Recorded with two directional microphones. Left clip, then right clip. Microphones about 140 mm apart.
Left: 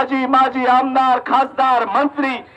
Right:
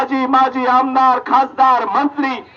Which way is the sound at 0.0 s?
30° left (ahead or behind).